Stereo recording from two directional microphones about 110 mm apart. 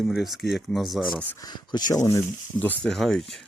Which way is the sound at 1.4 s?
40° left (ahead or behind).